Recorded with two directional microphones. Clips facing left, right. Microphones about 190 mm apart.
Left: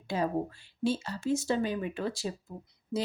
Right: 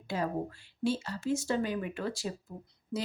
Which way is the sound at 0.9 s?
20° left (ahead or behind).